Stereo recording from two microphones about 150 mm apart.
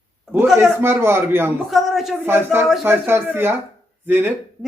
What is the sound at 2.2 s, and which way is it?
Speech, 15° right (ahead or behind).